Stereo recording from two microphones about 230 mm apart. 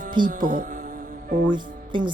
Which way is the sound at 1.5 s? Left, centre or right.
Centre.